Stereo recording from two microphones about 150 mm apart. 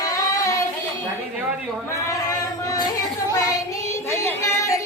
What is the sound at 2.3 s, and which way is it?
Female singing, 25° left (ahead or behind).